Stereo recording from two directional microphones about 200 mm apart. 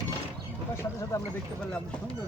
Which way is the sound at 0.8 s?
15° left (ahead or behind).